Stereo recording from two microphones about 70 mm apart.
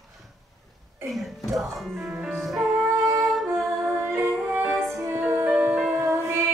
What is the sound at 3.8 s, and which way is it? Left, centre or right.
Music, right.